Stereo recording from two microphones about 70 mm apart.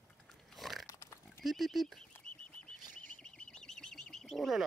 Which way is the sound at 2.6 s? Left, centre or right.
Centre.